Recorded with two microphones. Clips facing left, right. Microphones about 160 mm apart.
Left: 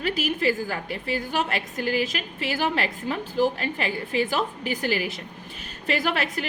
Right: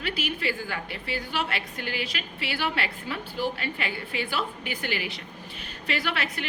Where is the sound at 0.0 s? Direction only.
40° left (ahead or behind).